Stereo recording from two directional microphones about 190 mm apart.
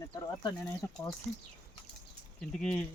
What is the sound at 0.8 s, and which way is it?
Speech, 10° left (ahead or behind).